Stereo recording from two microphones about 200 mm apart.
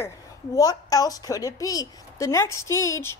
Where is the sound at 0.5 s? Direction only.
15° left (ahead or behind).